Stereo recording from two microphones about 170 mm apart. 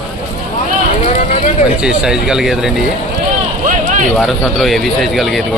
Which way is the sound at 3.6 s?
50° right (ahead or behind).